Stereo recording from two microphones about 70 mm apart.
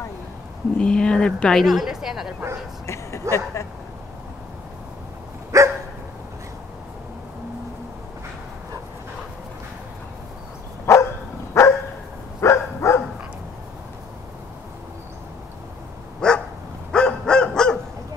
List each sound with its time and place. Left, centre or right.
0.7 s speech: centre
1.6 s a woman's voice: centre
2.9 s a sound: left
5.5 s dog: right
10.9 s dog: left
16.2 s dog: centre
16.9 s bow-wow: centre